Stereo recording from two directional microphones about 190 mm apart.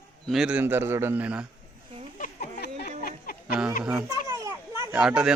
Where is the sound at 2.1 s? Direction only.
45° left (ahead or behind).